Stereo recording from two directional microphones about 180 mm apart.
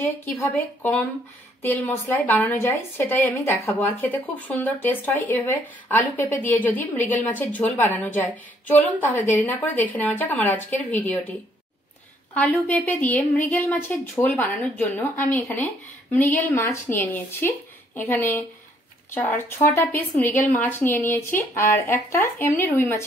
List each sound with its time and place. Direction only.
0.0 s speech: 10° left (ahead or behind)
12.4 s speech: 10° left (ahead or behind)